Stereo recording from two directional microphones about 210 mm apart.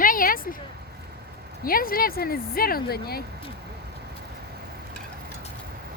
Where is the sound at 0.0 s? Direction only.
40° left (ahead or behind).